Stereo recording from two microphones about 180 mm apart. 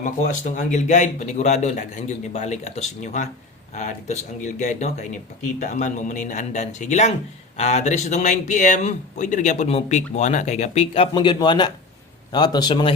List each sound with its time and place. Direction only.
0.0 s a man's voice: 45° left (ahead or behind); by 12.9 s 25° left (ahead or behind)